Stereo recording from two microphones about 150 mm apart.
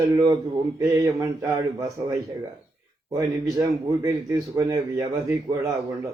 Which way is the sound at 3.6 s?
20° right (ahead or behind).